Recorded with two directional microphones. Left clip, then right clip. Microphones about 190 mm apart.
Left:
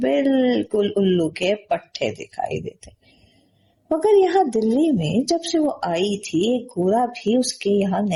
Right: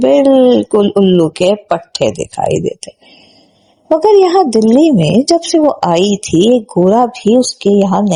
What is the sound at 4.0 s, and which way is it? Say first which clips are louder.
Speech: right 8 dB; 35° right (ahead or behind).